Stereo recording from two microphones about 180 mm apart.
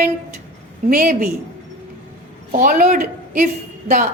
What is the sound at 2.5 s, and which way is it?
Speech, 50° right (ahead or behind).